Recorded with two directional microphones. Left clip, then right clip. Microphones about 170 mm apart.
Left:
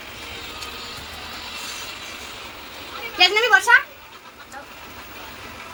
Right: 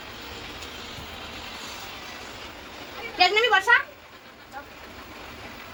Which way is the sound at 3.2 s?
30° left (ahead or behind).